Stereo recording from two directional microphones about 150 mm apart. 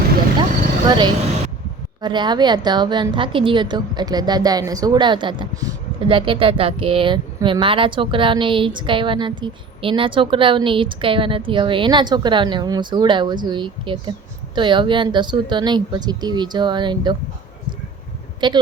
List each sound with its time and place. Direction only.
0.9 s a woman's voice: 30° right (ahead or behind)
18.3 s speech: 30° right (ahead or behind)